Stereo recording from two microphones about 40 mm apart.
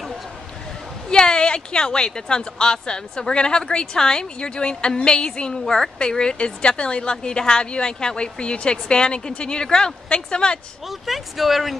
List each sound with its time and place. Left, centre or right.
1.0 s speech: centre
10.9 s speech: centre